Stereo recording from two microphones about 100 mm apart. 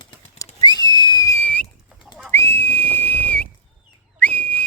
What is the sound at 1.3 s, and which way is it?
Whistle, 15° left (ahead or behind).